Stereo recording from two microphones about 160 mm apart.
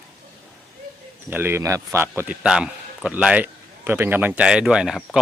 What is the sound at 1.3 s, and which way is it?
A man's voice, 15° right (ahead or behind).